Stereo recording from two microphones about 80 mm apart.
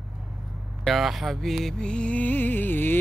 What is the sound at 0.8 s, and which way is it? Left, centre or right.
Music, centre.